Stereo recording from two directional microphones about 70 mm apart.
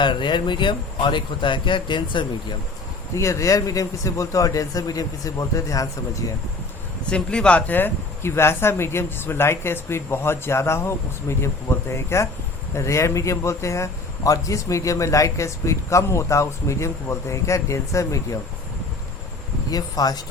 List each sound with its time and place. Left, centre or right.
0.4 s speech: left
3.2 s speech: left
7.1 s speech: centre
7.7 s speech: left
19.7 s speech: left